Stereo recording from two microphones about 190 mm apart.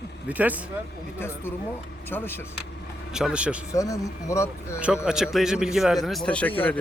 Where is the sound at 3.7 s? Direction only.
15° left (ahead or behind).